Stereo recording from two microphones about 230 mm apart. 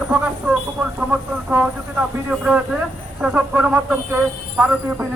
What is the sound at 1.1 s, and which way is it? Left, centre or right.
Bird, centre.